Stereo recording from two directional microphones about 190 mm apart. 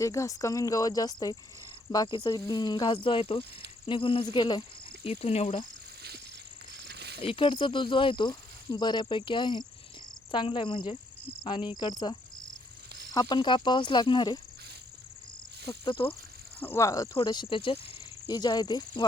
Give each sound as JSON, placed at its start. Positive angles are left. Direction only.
{"t": 0.0, "sound": "speech", "side_deg": 15}
{"t": 6.7, "sound": "a sound", "side_deg": -60}
{"t": 7.2, "sound": "speech", "side_deg": 30}
{"t": 11.4, "sound": "cricket", "side_deg": 25}
{"t": 13.1, "sound": "speech", "side_deg": 20}
{"t": 16.0, "sound": "speech", "side_deg": 15}